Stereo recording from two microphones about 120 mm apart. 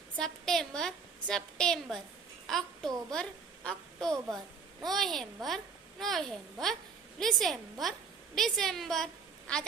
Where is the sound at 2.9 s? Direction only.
30° right (ahead or behind).